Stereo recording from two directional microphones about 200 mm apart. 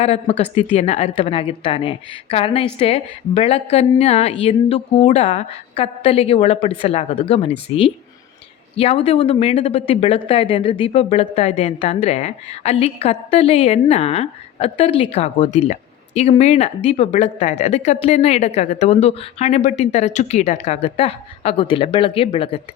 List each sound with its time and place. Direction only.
0.0 s a woman's voice: 30° left (ahead or behind)